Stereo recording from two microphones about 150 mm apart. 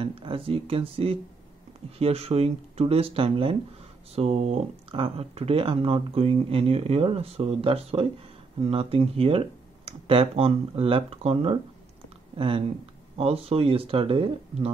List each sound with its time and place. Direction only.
0.0 s speech: 35° right (ahead or behind)